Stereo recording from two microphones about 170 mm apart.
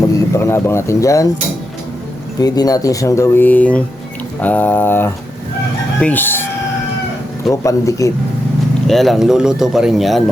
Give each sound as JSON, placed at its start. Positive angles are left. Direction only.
{"t": 0.0, "sound": "speech", "side_deg": 15}
{"t": 2.4, "sound": "speech", "side_deg": 20}
{"t": 7.5, "sound": "speech", "side_deg": 20}
{"t": 8.9, "sound": "speech", "side_deg": 0}